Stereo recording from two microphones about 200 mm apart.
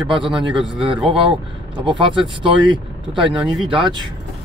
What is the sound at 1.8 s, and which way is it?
Speech, 25° right (ahead or behind).